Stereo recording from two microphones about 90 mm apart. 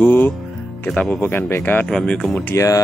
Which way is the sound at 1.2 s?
25° left (ahead or behind).